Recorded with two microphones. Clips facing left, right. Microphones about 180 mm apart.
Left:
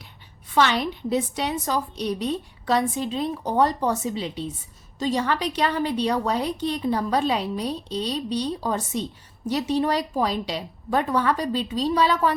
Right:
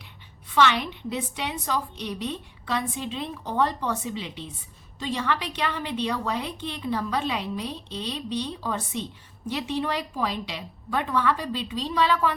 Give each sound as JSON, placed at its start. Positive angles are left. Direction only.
{"t": 0.5, "sound": "a woman's voice", "side_deg": 40}